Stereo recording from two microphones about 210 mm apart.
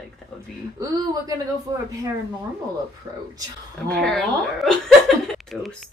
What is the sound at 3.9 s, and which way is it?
Speech, 5° left (ahead or behind).